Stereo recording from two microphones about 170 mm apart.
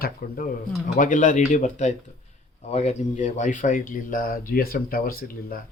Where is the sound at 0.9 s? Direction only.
50° left (ahead or behind).